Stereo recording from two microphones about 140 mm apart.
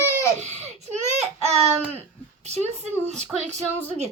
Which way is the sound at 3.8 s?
50° right (ahead or behind).